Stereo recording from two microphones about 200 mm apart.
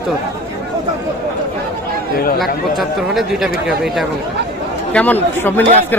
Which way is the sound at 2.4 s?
Centre (ahead or behind).